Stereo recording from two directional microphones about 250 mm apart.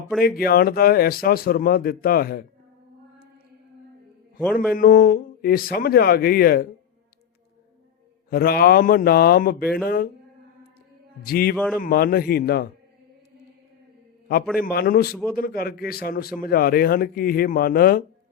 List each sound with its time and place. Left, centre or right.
0.2 s a man's voice: left
4.7 s a man's voice: left
8.3 s a man's voice: left
11.2 s a man's voice: left
11.5 s a man's voice: centre
11.8 s a man's voice: left
14.6 s a man's voice: left